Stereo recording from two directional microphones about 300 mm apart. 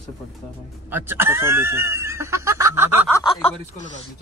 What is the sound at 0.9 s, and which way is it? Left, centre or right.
Speech, centre.